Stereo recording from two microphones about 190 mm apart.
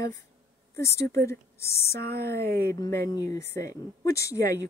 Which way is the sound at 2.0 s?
55° right (ahead or behind).